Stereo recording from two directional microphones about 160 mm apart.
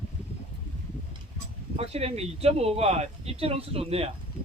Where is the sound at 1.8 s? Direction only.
40° right (ahead or behind).